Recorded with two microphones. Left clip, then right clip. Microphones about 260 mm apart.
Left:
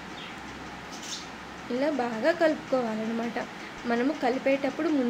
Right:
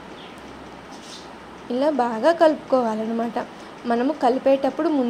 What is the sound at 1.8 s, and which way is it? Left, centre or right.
A woman's voice, centre.